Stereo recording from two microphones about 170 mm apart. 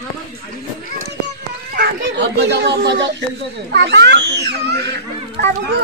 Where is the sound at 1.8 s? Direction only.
80° right.